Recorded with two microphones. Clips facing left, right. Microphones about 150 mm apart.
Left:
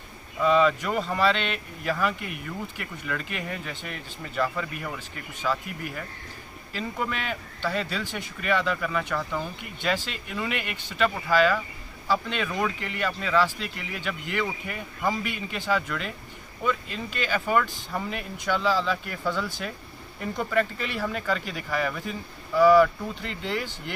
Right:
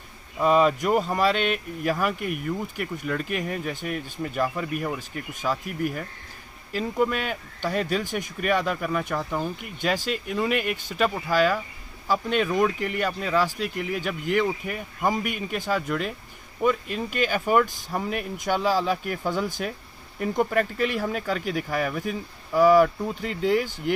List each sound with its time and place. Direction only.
0.4 s speech: 45° right (ahead or behind)